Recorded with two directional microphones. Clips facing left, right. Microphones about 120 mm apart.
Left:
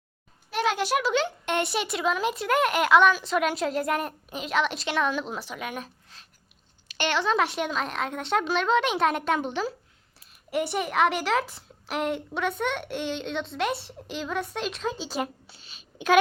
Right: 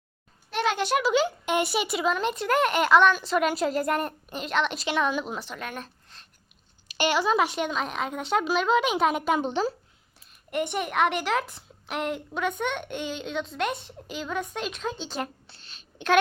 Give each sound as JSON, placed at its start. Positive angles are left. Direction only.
{"t": 0.5, "sound": "a child's voice", "side_deg": 5}
{"t": 6.9, "sound": "a child's voice", "side_deg": -10}
{"t": 9.4, "sound": "speech", "side_deg": -30}
{"t": 10.2, "sound": "a child's voice", "side_deg": 0}